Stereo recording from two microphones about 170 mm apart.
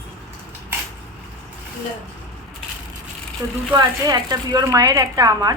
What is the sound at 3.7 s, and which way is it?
Speech, 20° right (ahead or behind).